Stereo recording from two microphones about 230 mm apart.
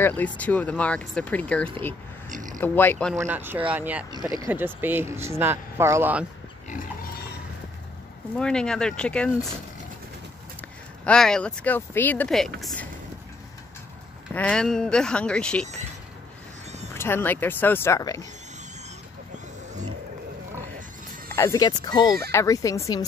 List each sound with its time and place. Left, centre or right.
0.4 s speech: centre
2.2 s a sound: right
2.6 s speech: centre
3.2 s speech: centre
6.7 s pig: left
8.4 s speech: centre
11.1 s speech: centre
14.3 s speech: centre
16.9 s speech: centre
21.4 s speech: centre